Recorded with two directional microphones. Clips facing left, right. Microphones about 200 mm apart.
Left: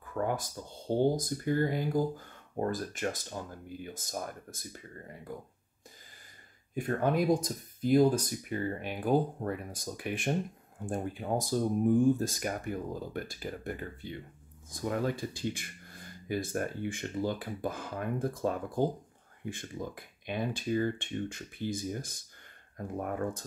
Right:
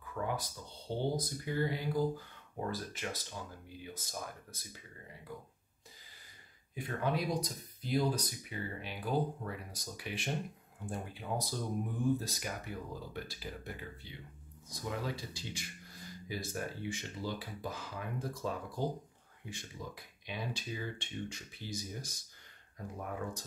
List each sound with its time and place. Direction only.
0.0 s speech: 50° left (ahead or behind)
6.7 s speech: 50° left (ahead or behind)